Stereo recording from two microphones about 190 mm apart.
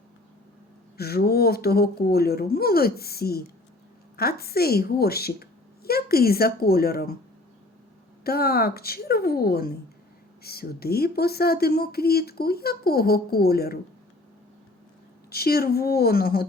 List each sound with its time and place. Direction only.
0.9 s speech: 55° left (ahead or behind)
8.2 s speech: 55° left (ahead or behind)
15.3 s speech: 55° left (ahead or behind)